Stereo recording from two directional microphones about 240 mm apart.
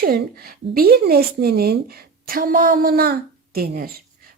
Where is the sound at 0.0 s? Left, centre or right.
Right.